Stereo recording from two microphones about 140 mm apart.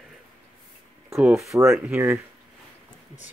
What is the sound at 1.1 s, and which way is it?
Speech, centre (ahead or behind).